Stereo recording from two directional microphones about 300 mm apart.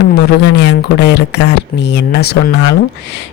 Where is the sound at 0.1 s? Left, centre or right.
Left.